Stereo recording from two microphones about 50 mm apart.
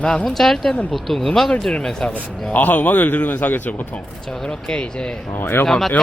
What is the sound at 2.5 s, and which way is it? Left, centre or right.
A man's voice, left.